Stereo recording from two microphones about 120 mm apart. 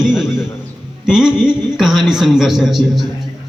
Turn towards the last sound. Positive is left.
turn(degrees=-5)  # may be behind; listen again after turning